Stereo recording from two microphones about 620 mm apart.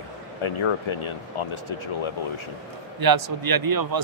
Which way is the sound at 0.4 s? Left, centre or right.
Left.